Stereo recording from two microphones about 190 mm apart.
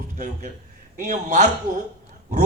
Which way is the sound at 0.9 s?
40° right (ahead or behind).